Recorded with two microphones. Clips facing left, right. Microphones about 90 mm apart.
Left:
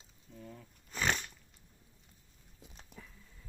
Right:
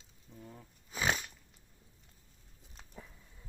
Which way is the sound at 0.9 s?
5° right (ahead or behind).